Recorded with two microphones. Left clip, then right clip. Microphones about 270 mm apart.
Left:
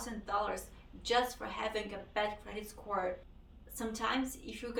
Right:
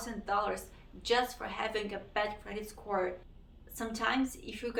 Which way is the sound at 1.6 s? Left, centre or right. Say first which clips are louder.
Right 3 dB; centre.